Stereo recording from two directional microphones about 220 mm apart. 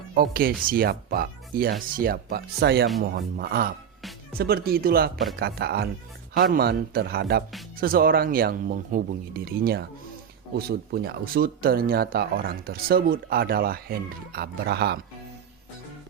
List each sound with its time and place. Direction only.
0.1 s speech: 40° right (ahead or behind)